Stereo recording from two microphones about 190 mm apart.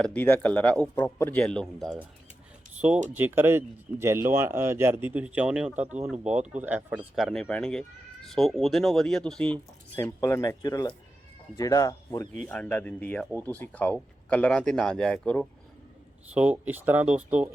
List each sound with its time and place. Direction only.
0.0 s speech: 10° left (ahead or behind)
3.2 s speech: 10° right (ahead or behind); by 15.4 s 5° left (ahead or behind)
16.3 s speech: 10° right (ahead or behind)